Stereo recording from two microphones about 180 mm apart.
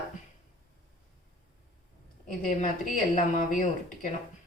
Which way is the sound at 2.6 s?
45° left (ahead or behind).